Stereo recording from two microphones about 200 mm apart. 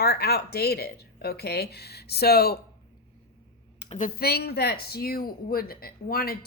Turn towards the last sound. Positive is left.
turn(degrees=50)  # may be behind; listen again after turning